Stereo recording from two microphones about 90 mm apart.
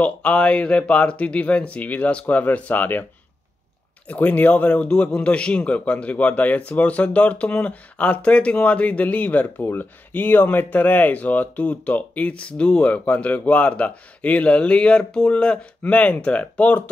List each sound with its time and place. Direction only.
0.0 s a man's voice: 15° left (ahead or behind)
4.1 s a man's voice: 15° left (ahead or behind)